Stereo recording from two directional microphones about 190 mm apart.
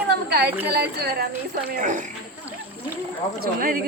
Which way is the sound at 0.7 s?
55° right (ahead or behind).